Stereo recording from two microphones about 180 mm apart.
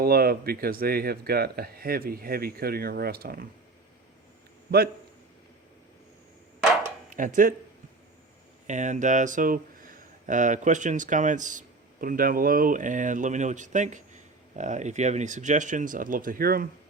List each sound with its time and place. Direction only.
0.0 s speech: 55° right (ahead or behind)
7.1 s speech: 45° right (ahead or behind)
8.6 s speech: 40° right (ahead or behind)